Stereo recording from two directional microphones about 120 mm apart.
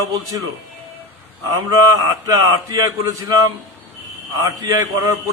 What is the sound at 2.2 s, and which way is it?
A man's voice, 25° right (ahead or behind).